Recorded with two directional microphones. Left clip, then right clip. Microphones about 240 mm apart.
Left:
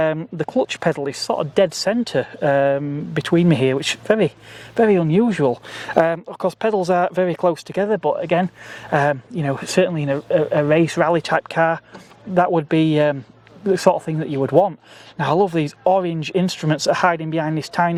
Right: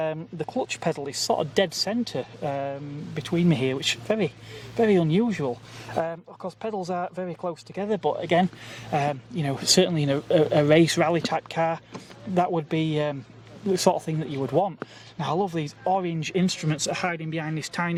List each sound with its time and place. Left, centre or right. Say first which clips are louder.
0.0 s speech: left 9 dB; left
1.3 s speech: left 6 dB; centre
1.7 s speech: left 8 dB; left
3.5 s speech: left 7 dB; left
4.8 s speech: left 6 dB; left
5.2 s speech: left 9 dB; left
7.9 s speech: left 4 dB; left
9.6 s speech: left 2 dB; centre
11.2 s speech: left 7 dB; left
13.7 s speech: left 6 dB; centre